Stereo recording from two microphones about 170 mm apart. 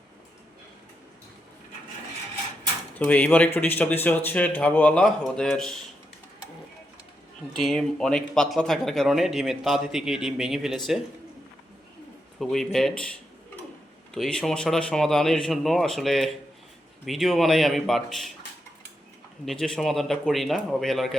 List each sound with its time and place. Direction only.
3.0 s speech: 10° left (ahead or behind)
7.6 s speech: centre (ahead or behind)
12.4 s speech: centre (ahead or behind)
14.1 s speech: 5° left (ahead or behind)
19.5 s speech: 5° left (ahead or behind)